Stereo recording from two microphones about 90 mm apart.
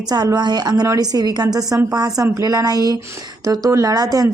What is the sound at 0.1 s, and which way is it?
A woman's voice, 45° right (ahead or behind).